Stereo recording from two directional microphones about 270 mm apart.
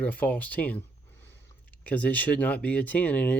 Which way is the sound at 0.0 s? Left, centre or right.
Centre.